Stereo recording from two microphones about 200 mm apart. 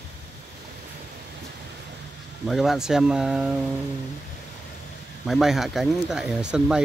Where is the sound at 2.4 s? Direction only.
Centre (ahead or behind).